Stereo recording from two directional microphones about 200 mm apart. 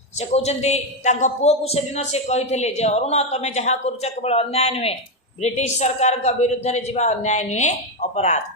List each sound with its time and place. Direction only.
0.2 s a man's voice: 35° left (ahead or behind)